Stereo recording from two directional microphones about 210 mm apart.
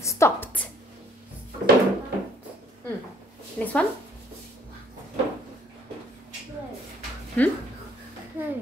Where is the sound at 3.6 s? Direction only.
5° left (ahead or behind).